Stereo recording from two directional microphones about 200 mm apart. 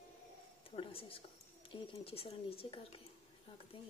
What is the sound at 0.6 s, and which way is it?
Speech, 30° left (ahead or behind).